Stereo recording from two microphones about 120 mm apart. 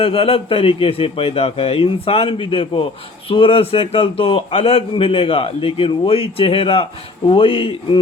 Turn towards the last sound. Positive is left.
turn(degrees=50)  # may be behind; listen again after turning